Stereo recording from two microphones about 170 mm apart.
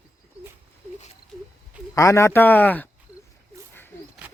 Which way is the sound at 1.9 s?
15° left (ahead or behind).